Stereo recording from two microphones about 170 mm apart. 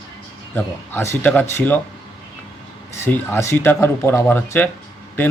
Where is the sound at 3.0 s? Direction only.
15° left (ahead or behind).